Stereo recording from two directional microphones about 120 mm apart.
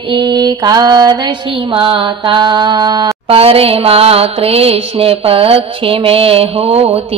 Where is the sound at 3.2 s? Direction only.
55° right (ahead or behind).